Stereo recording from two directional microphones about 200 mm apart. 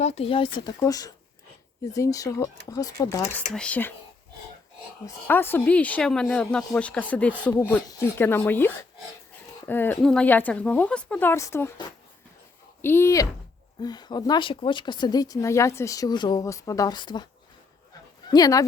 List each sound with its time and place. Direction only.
0.0 s speech: 30° left (ahead or behind); by 3.9 s 10° left (ahead or behind)
5.0 s speech: 10° left (ahead or behind)
18.3 s speech: 20° left (ahead or behind)